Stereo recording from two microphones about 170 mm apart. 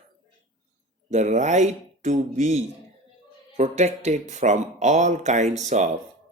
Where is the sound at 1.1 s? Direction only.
45° right (ahead or behind).